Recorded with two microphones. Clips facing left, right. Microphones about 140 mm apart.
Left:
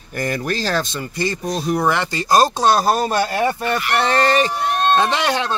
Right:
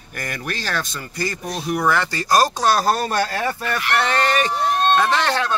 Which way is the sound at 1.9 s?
20° left (ahead or behind).